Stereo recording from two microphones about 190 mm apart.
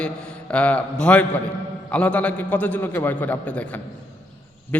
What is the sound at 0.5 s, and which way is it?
A man's voice, 5° left (ahead or behind).